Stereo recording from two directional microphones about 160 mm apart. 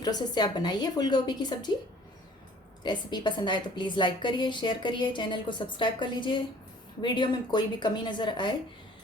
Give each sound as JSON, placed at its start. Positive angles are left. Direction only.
{"t": 0.0, "sound": "a woman's voice", "side_deg": 25}
{"t": 2.8, "sound": "a woman's voice", "side_deg": 30}